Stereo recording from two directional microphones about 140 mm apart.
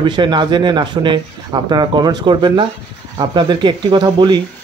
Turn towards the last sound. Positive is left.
turn(degrees=-35)  # may be behind; listen again after turning